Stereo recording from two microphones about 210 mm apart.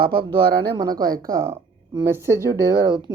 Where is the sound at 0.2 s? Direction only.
25° right (ahead or behind).